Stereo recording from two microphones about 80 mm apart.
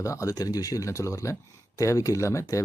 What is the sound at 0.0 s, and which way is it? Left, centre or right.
A man's voice, left.